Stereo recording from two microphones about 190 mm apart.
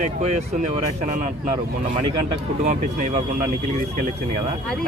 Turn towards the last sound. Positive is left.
turn(degrees=-40)  # may be behind; listen again after turning